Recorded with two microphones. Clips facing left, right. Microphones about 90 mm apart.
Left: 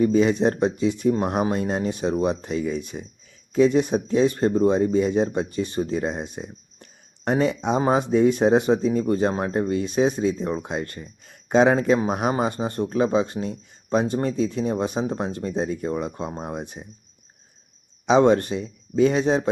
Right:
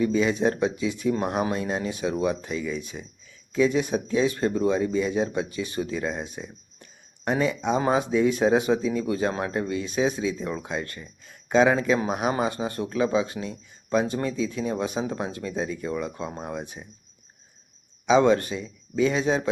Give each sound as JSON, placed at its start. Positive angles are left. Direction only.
{"t": 0.0, "sound": "speech", "side_deg": 50}
{"t": 0.4, "sound": "speech", "side_deg": 35}
{"t": 0.8, "sound": "speech", "side_deg": 50}
{"t": 1.1, "sound": "speech", "side_deg": 30}
{"t": 2.6, "sound": "speech", "side_deg": 45}
{"t": 7.8, "sound": "speech", "side_deg": 30}
{"t": 8.1, "sound": "speech", "side_deg": 50}
{"t": 8.4, "sound": "a man's voice", "side_deg": 30}
{"t": 11.9, "sound": "speech", "side_deg": 35}
{"t": 14.6, "sound": "speech", "side_deg": 35}
{"t": 15.1, "sound": "speech", "side_deg": 30}
{"t": 15.5, "sound": "speech", "side_deg": 50}
{"t": 18.2, "sound": "speech", "side_deg": 40}
{"t": 18.5, "sound": "speech", "side_deg": 55}